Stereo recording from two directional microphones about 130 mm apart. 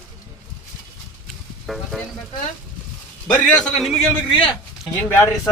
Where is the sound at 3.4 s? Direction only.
5° left (ahead or behind).